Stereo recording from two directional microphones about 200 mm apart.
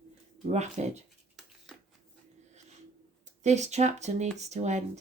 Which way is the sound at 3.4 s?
35° right (ahead or behind).